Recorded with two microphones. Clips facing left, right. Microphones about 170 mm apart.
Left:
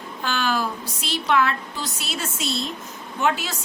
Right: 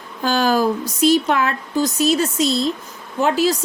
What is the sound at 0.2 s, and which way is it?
A woman's voice, 40° right (ahead or behind).